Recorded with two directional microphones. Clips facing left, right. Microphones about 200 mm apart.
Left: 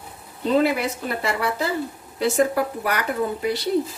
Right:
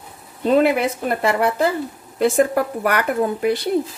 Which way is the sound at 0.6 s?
55° right (ahead or behind).